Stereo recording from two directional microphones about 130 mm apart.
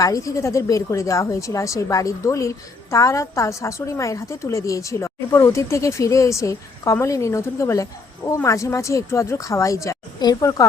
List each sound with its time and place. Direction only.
0.0 s a woman's voice: 25° left (ahead or behind)